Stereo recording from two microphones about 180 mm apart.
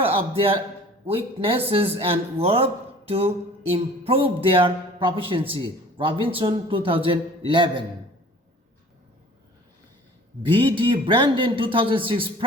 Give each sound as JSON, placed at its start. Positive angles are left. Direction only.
{"t": 0.0, "sound": "a man's voice", "side_deg": -30}
{"t": 3.1, "sound": "music", "side_deg": -30}
{"t": 10.5, "sound": "music", "side_deg": -30}